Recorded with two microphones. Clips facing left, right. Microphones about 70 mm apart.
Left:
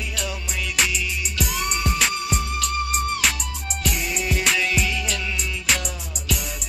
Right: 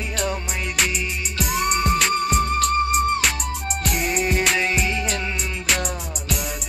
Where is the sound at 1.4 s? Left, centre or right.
Right.